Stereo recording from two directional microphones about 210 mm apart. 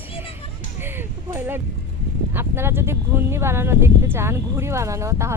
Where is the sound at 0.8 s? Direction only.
10° right (ahead or behind).